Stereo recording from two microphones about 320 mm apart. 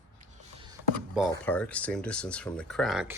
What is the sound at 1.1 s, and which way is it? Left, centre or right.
Speech, centre.